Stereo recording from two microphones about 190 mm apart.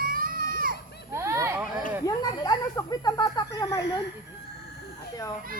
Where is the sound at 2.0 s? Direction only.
20° left (ahead or behind).